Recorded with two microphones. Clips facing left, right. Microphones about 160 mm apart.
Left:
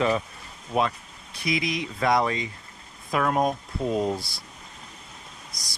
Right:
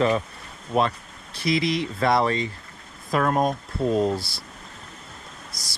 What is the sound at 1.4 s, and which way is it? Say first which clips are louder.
Speech: right 4 dB; 35° right (ahead or behind).